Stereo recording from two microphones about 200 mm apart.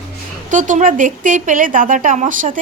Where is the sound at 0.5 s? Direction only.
40° right (ahead or behind).